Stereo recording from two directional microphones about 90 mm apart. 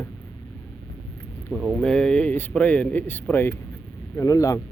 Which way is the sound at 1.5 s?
Centre (ahead or behind).